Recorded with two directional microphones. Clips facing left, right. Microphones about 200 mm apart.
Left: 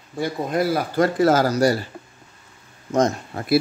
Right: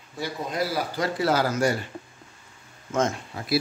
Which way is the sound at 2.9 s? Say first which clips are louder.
Left 5 dB; 35° left (ahead or behind).